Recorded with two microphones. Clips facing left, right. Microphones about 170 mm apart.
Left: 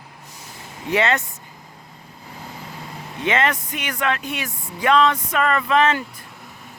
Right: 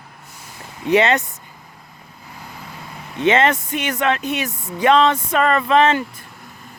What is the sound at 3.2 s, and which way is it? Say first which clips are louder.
Speech: right 5 dB; 25° right (ahead or behind).